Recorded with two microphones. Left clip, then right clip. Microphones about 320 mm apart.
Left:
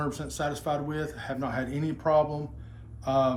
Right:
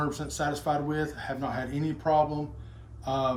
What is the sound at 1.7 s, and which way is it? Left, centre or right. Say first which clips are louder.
Speech: even; centre.